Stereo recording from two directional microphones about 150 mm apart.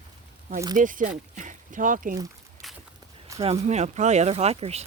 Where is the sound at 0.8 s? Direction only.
60° right (ahead or behind).